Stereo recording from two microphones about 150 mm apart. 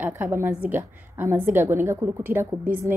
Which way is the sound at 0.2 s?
15° right (ahead or behind).